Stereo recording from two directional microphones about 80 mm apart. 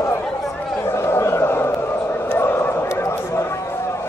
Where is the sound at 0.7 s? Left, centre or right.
Left.